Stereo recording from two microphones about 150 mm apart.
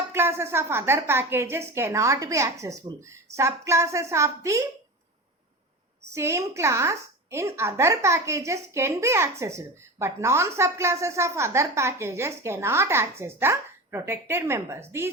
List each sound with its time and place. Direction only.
0.1 s a woman's voice: 15° right (ahead or behind)
6.1 s a woman's voice: 20° right (ahead or behind)